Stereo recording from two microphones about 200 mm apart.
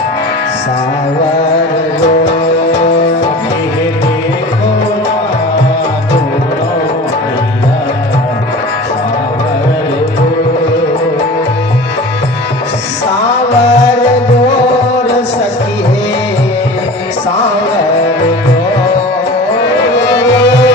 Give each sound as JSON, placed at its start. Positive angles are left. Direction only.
{"t": 2.7, "sound": "music", "side_deg": 60}
{"t": 19.6, "sound": "music", "side_deg": 60}